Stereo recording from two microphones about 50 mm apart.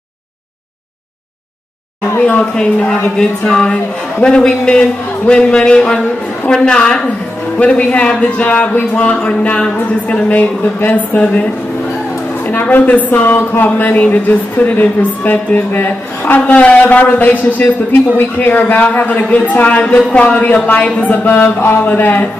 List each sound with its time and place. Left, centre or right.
2.1 s speech: left
2.4 s a man's voice: centre
12.4 s a man's voice: left
13.7 s a man's voice: left
16.4 s a man's voice: left